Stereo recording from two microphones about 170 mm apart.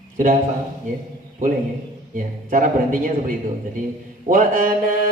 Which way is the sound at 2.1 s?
50° right (ahead or behind).